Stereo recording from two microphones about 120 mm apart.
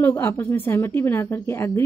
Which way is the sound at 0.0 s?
20° left (ahead or behind).